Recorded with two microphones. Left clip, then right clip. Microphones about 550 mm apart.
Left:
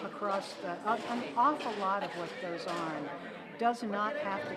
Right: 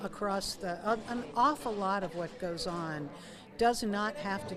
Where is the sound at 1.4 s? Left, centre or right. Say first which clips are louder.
Right 1 dB; right.